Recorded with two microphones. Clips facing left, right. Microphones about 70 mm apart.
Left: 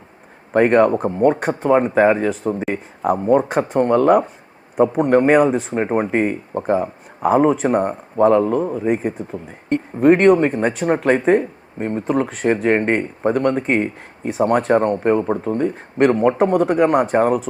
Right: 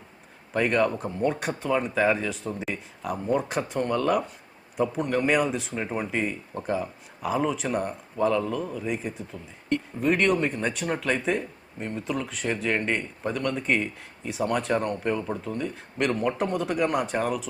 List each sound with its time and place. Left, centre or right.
0.5 s speech: left